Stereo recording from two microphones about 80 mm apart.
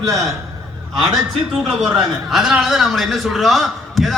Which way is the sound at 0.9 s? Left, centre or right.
Centre.